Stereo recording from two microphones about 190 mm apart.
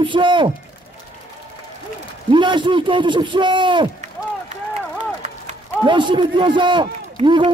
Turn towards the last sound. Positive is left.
turn(degrees=-25)  # may be behind; listen again after turning